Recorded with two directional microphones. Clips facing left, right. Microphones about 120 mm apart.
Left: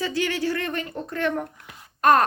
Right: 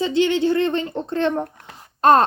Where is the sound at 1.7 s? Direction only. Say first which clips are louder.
Right 4 dB; 25° right (ahead or behind).